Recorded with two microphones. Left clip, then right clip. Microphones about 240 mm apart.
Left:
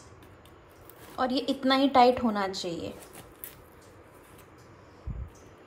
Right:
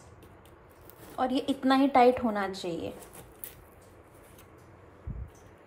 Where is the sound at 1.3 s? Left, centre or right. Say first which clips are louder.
Left 1 dB; centre.